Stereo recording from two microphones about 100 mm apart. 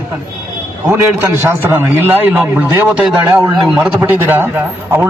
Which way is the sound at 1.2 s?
25° right (ahead or behind).